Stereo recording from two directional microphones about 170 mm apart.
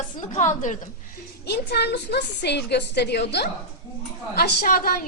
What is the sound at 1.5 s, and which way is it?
A woman's voice, 75° left (ahead or behind).